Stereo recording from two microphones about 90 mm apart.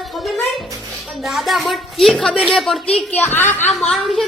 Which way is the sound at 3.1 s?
20° left (ahead or behind).